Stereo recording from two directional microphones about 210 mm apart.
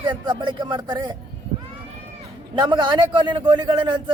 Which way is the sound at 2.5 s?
20° right (ahead or behind).